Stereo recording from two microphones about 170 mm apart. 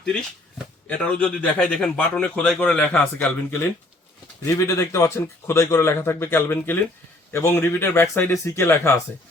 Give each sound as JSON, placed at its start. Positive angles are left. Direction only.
{"t": 0.9, "sound": "a man's voice", "side_deg": 10}